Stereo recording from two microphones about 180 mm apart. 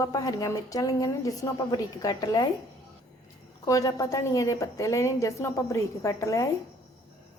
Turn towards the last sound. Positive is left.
turn(degrees=15)  # may be behind; listen again after turning